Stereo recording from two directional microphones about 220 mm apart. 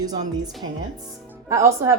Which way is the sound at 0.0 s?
15° right (ahead or behind).